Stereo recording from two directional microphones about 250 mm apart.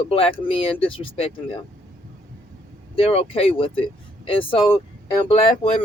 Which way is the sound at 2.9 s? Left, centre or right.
Left.